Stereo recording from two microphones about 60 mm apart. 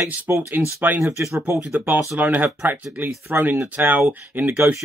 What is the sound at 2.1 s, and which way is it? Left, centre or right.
Speech, right.